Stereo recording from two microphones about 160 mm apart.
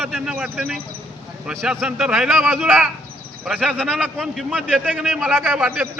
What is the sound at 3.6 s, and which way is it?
A man's voice, 10° right (ahead or behind).